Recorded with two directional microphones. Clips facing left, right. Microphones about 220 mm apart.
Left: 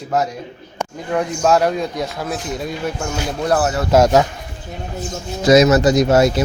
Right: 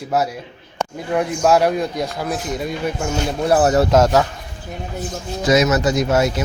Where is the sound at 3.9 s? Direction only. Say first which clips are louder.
Left 2 dB; 15° left (ahead or behind).